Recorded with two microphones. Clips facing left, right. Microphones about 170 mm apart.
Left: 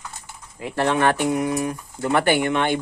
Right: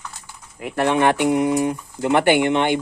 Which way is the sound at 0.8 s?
15° right (ahead or behind).